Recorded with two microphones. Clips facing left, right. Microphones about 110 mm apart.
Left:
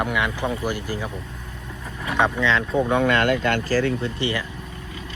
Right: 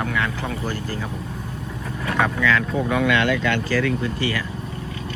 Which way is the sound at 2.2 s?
25° left (ahead or behind).